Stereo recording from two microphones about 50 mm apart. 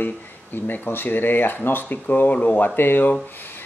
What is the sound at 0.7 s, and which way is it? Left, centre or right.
Speech, left.